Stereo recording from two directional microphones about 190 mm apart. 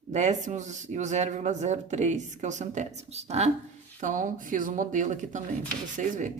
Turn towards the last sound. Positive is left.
turn(degrees=-40)  # may be behind; listen again after turning